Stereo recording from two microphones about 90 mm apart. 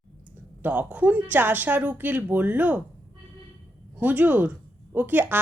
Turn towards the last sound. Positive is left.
turn(degrees=-20)  # may be behind; listen again after turning